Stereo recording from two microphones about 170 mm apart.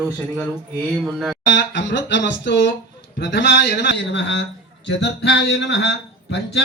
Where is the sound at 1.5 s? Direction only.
90° left.